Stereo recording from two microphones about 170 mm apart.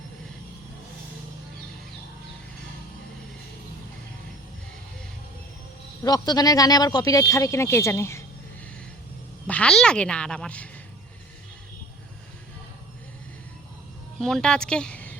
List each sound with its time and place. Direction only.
6.0 s speech: 20° left (ahead or behind)
9.5 s a woman's voice: 5° left (ahead or behind)
14.2 s speech: centre (ahead or behind)